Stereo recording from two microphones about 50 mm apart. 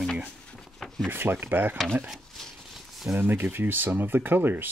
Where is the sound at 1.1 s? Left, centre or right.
Right.